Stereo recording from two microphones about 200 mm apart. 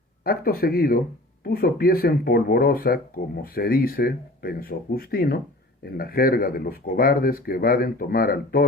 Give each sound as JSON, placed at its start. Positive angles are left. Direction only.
{"t": 0.3, "sound": "speech", "side_deg": 50}